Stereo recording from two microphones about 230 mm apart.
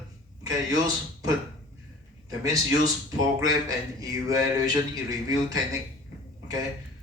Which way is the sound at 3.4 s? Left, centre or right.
Centre.